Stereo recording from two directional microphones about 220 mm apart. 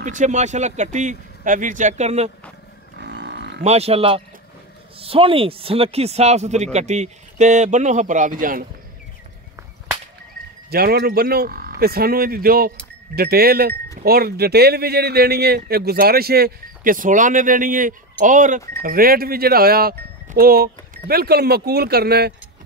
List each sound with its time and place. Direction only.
0.0 s speech: 35° right (ahead or behind)
3.0 s livestock: 50° right (ahead or behind)
3.6 s speech: 30° right (ahead or behind)
10.7 s speech: 45° right (ahead or behind)